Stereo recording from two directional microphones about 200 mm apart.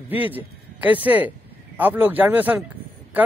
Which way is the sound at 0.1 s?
10° right (ahead or behind).